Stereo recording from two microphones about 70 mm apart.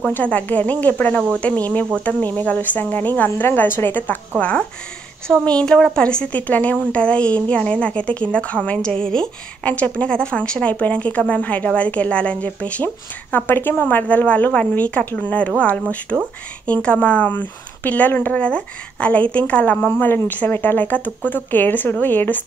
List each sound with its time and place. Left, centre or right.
0.1 s speech: left
3.3 s a woman's voice: left
4.4 s a woman's voice: centre
16.1 s speech: centre
16.6 s a woman's voice: centre